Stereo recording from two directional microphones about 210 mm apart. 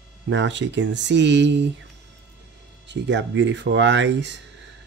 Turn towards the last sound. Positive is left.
turn(degrees=-60)  # may be behind; listen again after turning